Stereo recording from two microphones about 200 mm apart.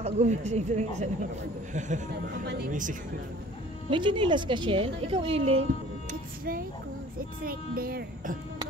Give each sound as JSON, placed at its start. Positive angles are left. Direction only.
{"t": 0.0, "sound": "speech", "side_deg": -35}
{"t": 3.9, "sound": "a woman's voice", "side_deg": -25}
{"t": 7.4, "sound": "a child's voice", "side_deg": -50}